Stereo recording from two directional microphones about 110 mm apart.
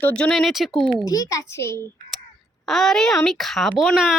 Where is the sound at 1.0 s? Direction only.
35° left (ahead or behind).